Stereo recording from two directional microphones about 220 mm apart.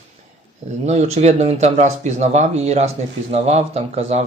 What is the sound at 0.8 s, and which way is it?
Speech, 30° right (ahead or behind).